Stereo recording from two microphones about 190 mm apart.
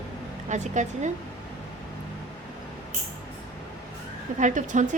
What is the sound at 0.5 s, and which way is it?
Speech, 40° right (ahead or behind).